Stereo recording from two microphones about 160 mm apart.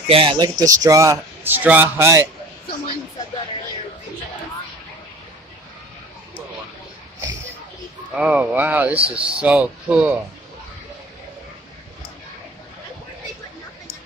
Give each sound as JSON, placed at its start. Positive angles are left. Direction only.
{"t": 0.1, "sound": "speech", "side_deg": -30}
{"t": 8.1, "sound": "speech", "side_deg": -10}
{"t": 8.9, "sound": "speech", "side_deg": -35}
{"t": 9.4, "sound": "speech", "side_deg": -10}